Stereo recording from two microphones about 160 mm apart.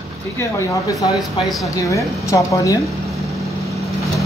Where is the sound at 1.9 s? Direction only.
20° left (ahead or behind).